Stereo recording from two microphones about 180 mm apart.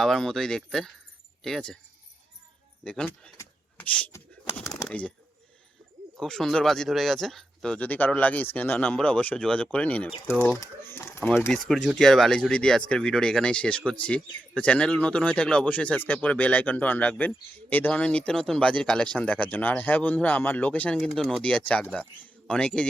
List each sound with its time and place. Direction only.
0.0 s speech: centre (ahead or behind)
2.8 s speech: 5° left (ahead or behind)
3.3 s a sound: 15° left (ahead or behind)
4.5 s bird: 15° left (ahead or behind)
4.8 s speech: 5° left (ahead or behind)
6.1 s speech: centre (ahead or behind)